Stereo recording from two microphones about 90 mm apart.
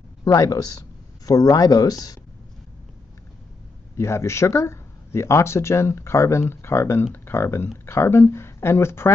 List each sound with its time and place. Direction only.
0.2 s speech: 40° left (ahead or behind)
3.9 s speech: 30° left (ahead or behind)